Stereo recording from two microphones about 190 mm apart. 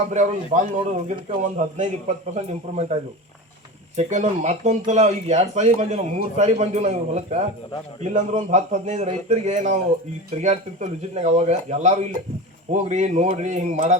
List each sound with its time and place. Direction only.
0.1 s speech: 40° right (ahead or behind)